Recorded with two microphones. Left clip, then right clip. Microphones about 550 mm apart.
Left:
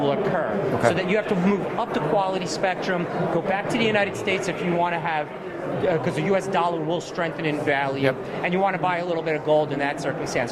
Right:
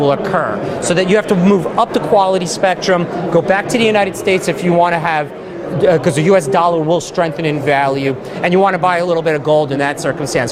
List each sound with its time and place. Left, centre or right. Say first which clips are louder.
0.0 s speech: right 9 dB; right